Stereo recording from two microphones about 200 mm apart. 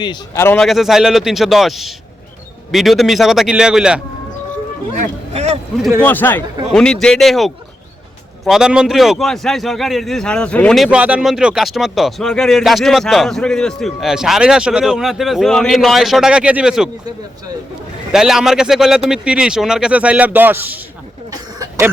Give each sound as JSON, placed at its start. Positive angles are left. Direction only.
{"t": 0.0, "sound": "a man's voice", "side_deg": 20}
{"t": 0.4, "sound": "a man's voice", "side_deg": 5}
{"t": 4.9, "sound": "speech", "side_deg": -35}
{"t": 6.0, "sound": "a man's voice", "side_deg": 10}
{"t": 18.1, "sound": "a man's voice", "side_deg": 0}